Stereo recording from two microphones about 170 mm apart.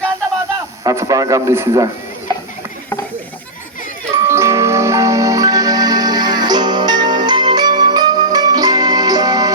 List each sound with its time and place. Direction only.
0.9 s a man's voice: 20° right (ahead or behind)
4.1 s music: 15° right (ahead or behind)